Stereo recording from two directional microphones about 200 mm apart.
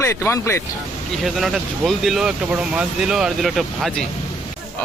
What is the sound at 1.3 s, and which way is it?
A man's voice, centre (ahead or behind).